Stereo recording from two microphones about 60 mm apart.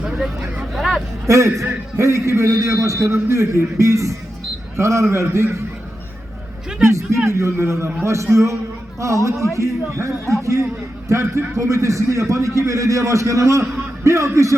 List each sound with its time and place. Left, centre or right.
0.0 s vehicle: centre
0.7 s hubbub: centre
1.3 s a man's voice: right
6.8 s a man's voice: right